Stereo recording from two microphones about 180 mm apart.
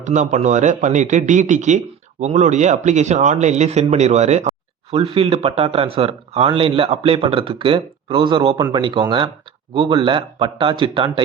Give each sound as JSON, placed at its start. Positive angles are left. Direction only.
{"t": 0.0, "sound": "speech", "side_deg": -40}